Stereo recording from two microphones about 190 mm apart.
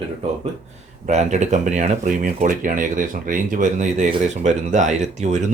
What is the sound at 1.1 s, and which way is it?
Speech, 35° right (ahead or behind).